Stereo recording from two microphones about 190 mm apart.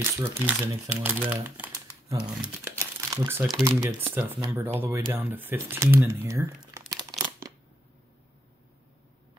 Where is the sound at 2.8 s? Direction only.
15° right (ahead or behind).